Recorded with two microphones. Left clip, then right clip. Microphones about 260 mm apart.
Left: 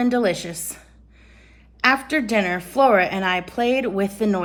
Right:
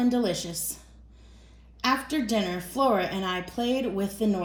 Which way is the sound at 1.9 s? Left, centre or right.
Left.